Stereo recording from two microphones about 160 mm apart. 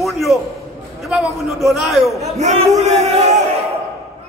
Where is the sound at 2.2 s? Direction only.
45° right (ahead or behind).